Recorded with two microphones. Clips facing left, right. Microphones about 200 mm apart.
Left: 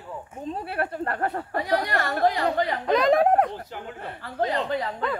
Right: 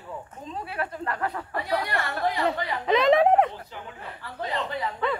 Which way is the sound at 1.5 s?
40° left (ahead or behind).